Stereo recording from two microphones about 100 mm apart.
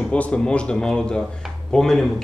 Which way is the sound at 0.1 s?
10° left (ahead or behind).